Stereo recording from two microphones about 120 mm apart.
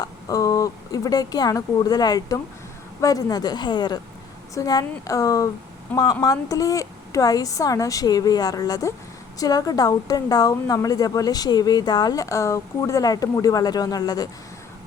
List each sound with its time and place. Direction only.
0.0 s a woman's voice: 30° left (ahead or behind)
5.9 s speech: 10° left (ahead or behind)
6.2 s a woman's voice: 30° left (ahead or behind)